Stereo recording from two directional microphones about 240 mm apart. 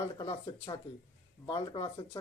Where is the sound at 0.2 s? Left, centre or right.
Centre.